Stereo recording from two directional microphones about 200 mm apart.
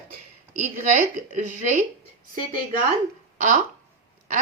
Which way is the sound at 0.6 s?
35° right (ahead or behind).